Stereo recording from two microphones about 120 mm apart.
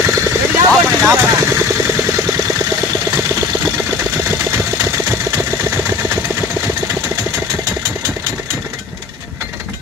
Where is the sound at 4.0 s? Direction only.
20° right (ahead or behind).